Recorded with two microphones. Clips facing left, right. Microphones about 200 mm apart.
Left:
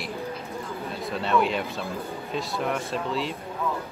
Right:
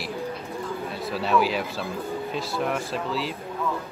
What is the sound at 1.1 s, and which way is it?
Speech, 5° right (ahead or behind).